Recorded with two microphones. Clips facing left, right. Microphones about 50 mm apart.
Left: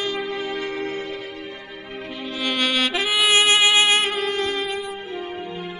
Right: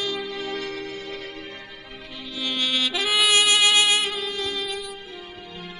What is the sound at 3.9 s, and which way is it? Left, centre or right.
Music, left.